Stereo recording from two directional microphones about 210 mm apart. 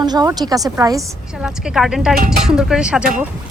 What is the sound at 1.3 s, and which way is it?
Speech, 5° right (ahead or behind).